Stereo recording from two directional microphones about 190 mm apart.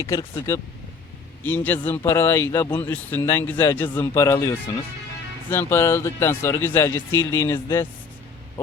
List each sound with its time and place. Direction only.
0.0 s speech: 15° left (ahead or behind)